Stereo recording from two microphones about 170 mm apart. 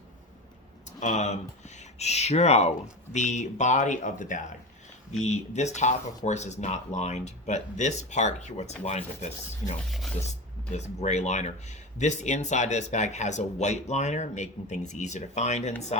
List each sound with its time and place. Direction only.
0.9 s speech: 45° left (ahead or behind)